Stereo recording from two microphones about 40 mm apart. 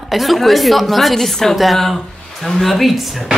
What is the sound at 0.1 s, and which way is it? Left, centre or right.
Speech, centre.